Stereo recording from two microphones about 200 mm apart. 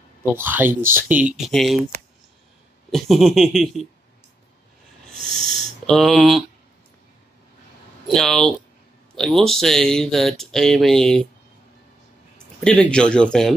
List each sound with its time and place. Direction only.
0.2 s speech: 10° right (ahead or behind)
2.9 s speech: centre (ahead or behind)
5.1 s owl: centre (ahead or behind)
5.9 s speech: centre (ahead or behind)
8.1 s speech: centre (ahead or behind)
12.5 s speech: 5° left (ahead or behind)